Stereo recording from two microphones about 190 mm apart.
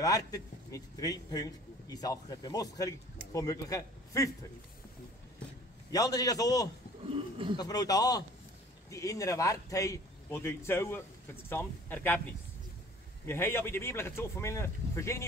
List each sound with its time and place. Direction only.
0.0 s a man's voice: 20° left (ahead or behind)
5.9 s a man's voice: 20° left (ahead or behind)
7.1 s speech: 30° right (ahead or behind)
7.5 s a man's voice: 20° left (ahead or behind)
13.2 s a man's voice: 10° left (ahead or behind)